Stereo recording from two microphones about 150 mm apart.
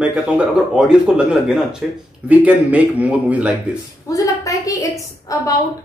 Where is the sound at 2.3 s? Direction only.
10° right (ahead or behind).